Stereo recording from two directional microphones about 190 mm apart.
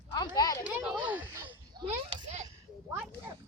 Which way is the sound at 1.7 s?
30° right (ahead or behind).